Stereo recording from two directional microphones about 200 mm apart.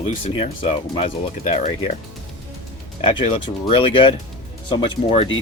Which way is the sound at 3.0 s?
25° left (ahead or behind).